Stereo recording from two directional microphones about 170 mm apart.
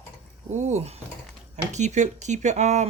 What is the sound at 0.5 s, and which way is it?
Speech, 45° right (ahead or behind).